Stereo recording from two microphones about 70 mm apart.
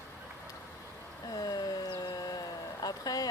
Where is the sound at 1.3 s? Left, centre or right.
Left.